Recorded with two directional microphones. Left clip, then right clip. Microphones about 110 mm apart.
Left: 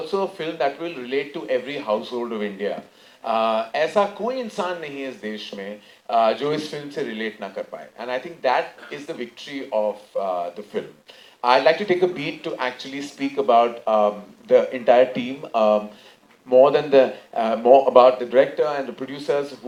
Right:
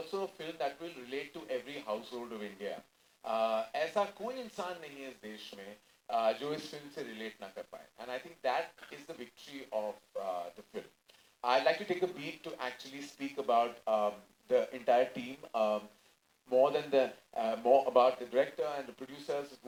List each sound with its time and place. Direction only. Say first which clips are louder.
0.1 s speech: left 16 dB; 25° left (ahead or behind)
9.8 s speech: left 15 dB; 70° left (ahead or behind)
11.4 s speech: left 13 dB; 25° left (ahead or behind)